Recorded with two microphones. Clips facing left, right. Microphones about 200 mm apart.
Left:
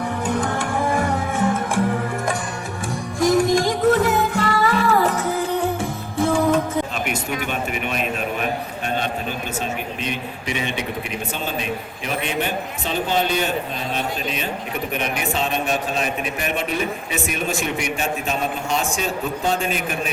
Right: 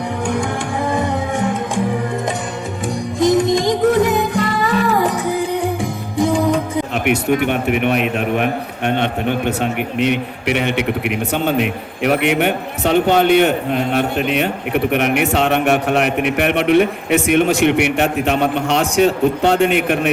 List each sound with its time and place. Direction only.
0.3 s music: 15° right (ahead or behind)
3.2 s music: 20° right (ahead or behind)
6.9 s a man's voice: 65° right (ahead or behind)